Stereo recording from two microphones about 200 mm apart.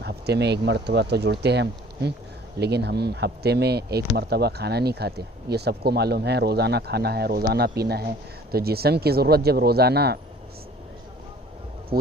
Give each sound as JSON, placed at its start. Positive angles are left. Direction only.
{"t": 0.0, "sound": "speech", "side_deg": -55}